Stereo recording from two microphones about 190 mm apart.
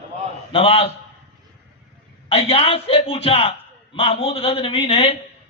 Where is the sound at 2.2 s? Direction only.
30° left (ahead or behind).